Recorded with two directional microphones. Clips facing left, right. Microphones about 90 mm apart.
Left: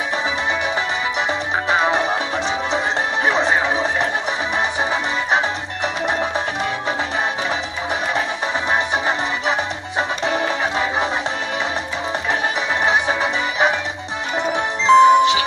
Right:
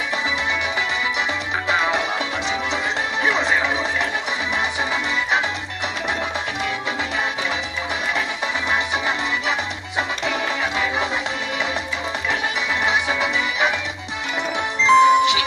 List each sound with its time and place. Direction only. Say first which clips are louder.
1.7 s music: left 3 dB; 35° left (ahead or behind)
3.3 s a sound: left 2 dB; 35° left (ahead or behind)
6.0 s music: left 4 dB; 35° left (ahead or behind)
8.6 s music: left 3 dB; 35° left (ahead or behind)
12.8 s music: left 3 dB; 35° left (ahead or behind)
14.8 s music: left 3 dB; 35° left (ahead or behind)